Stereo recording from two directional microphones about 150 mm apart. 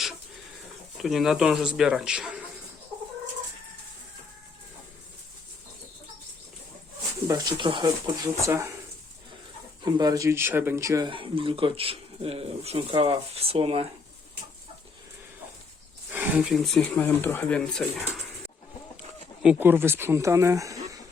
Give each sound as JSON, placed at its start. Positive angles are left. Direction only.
{"t": 0.9, "sound": "speech", "side_deg": 0}
{"t": 7.3, "sound": "speech", "side_deg": -25}
{"t": 9.8, "sound": "speech", "side_deg": -25}
{"t": 11.1, "sound": "speech", "side_deg": -35}
{"t": 16.1, "sound": "speech", "side_deg": -10}
{"t": 16.8, "sound": "speech", "side_deg": 10}
{"t": 19.4, "sound": "speech", "side_deg": -10}